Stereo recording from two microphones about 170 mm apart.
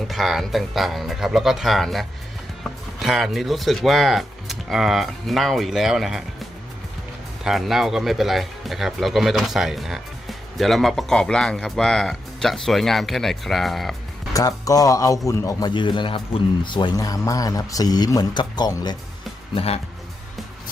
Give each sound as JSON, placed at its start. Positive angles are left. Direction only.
{"t": 0.1, "sound": "speech", "side_deg": 0}
{"t": 7.4, "sound": "speech", "side_deg": 0}
{"t": 14.3, "sound": "speech", "side_deg": 20}
{"t": 19.5, "sound": "speech", "side_deg": 35}